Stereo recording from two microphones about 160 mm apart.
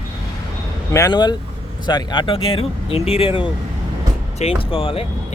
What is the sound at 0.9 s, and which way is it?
Speech, 20° left (ahead or behind).